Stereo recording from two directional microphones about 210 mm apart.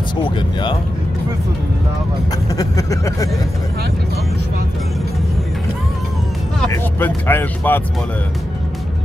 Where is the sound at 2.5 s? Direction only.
15° left (ahead or behind).